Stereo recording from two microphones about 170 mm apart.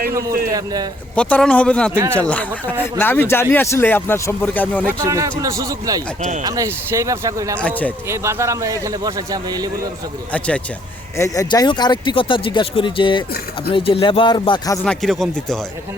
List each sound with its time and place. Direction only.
0.1 s speech: 20° right (ahead or behind)
1.1 s speech: 5° left (ahead or behind)
5.0 s speech: 20° right (ahead or behind)
7.6 s speech: 10° left (ahead or behind)
8.0 s a man's voice: 15° right (ahead or behind)
10.3 s speech: 5° left (ahead or behind)
11.2 s speech: 20° left (ahead or behind)
14.8 s speech: centre (ahead or behind)